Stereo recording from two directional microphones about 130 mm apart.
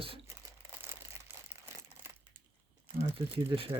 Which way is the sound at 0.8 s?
15° right (ahead or behind).